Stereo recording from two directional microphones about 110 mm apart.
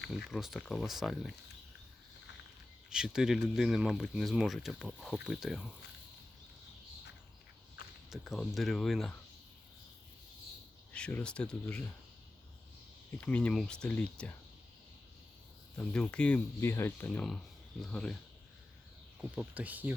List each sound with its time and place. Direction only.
0.1 s speech: 5° right (ahead or behind)
2.9 s speech: 5° right (ahead or behind)
8.1 s speech: 5° right (ahead or behind)
10.9 s speech: 10° left (ahead or behind)
13.1 s speech: 10° left (ahead or behind)
15.8 s speech: 10° left (ahead or behind)
16.6 s speech: 20° left (ahead or behind)
17.1 s speech: 5° left (ahead or behind)
19.2 s speech: 15° right (ahead or behind)